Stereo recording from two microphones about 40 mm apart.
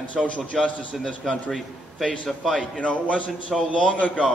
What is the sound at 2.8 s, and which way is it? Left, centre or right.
A man's voice, left.